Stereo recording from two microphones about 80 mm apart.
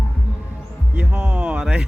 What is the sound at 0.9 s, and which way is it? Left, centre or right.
Speech, centre.